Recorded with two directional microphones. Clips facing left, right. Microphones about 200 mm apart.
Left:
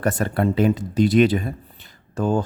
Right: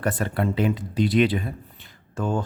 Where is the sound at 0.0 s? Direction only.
45° left (ahead or behind).